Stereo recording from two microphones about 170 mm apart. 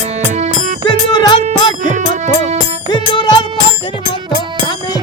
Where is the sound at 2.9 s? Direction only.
25° left (ahead or behind).